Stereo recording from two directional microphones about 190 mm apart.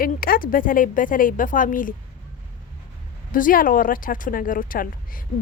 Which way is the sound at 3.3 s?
45° left (ahead or behind).